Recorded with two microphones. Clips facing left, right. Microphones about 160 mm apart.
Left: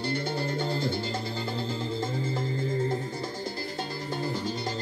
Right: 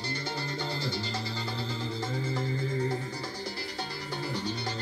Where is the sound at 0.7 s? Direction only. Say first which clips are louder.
Left 5 dB; 50° left (ahead or behind).